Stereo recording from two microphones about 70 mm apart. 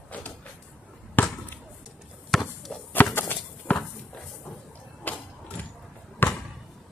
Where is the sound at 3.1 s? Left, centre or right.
Left.